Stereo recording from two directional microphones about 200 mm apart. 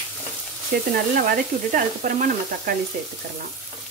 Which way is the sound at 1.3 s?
40° right (ahead or behind).